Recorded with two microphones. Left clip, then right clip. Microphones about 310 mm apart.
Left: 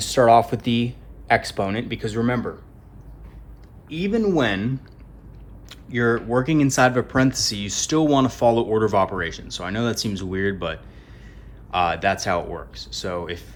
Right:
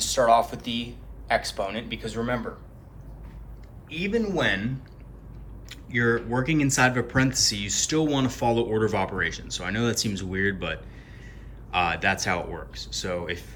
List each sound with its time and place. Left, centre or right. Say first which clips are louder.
0.0 s speech: left 5 dB; left
3.8 s speech: left 5 dB; centre